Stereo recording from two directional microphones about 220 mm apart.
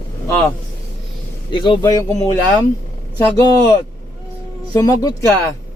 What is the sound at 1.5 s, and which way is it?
Speech, 20° left (ahead or behind).